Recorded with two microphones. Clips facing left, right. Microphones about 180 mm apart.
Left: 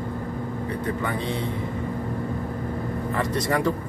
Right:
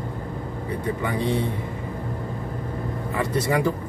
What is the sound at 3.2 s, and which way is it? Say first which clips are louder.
Speech: right 2 dB; 5° right (ahead or behind).